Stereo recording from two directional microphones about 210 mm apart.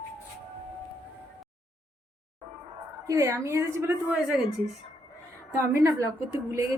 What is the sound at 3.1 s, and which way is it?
A woman's voice, 15° right (ahead or behind).